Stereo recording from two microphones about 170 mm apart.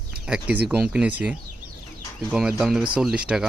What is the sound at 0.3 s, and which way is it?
Speech, 5° right (ahead or behind).